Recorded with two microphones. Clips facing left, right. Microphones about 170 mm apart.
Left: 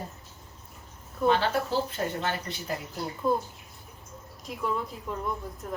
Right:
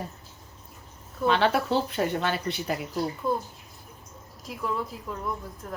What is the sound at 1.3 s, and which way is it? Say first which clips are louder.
Speech: right 3 dB; 70° right (ahead or behind).